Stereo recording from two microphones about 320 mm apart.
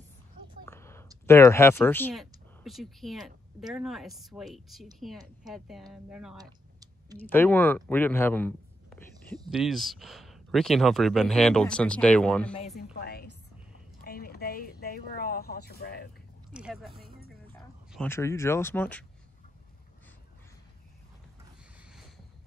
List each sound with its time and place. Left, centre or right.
0.7 s a sound: centre
1.2 s speech: centre
7.2 s speech: centre
12.5 s a woman's voice: centre
16.5 s speech: centre
21.7 s a sound: centre